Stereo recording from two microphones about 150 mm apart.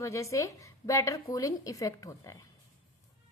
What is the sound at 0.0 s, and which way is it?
A woman's voice, 20° left (ahead or behind).